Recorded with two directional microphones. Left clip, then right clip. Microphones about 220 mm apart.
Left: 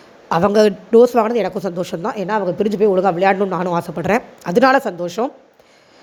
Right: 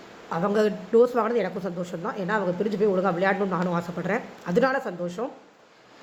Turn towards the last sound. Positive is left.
turn(degrees=35)  # may be behind; listen again after turning